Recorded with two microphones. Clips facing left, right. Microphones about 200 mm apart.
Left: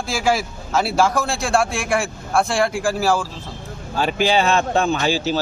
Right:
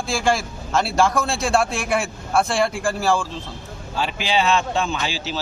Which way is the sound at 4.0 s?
45° left (ahead or behind).